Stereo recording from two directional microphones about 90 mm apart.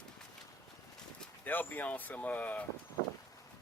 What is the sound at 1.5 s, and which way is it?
Speech, 20° left (ahead or behind).